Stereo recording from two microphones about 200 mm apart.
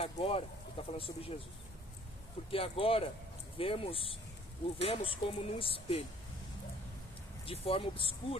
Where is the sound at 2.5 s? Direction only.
25° left (ahead or behind).